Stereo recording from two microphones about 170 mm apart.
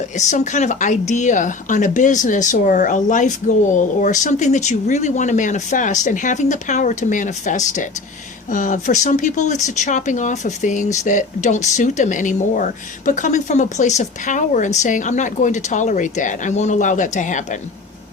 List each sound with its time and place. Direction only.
0.2 s speech: 45° left (ahead or behind)